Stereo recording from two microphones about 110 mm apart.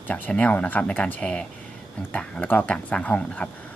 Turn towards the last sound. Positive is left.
turn(degrees=10)  # may be behind; listen again after turning